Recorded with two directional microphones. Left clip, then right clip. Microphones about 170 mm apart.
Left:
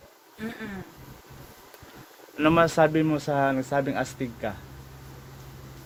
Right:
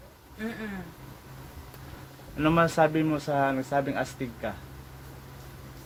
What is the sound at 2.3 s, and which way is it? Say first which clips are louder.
Speech: left 3 dB; 70° left (ahead or behind).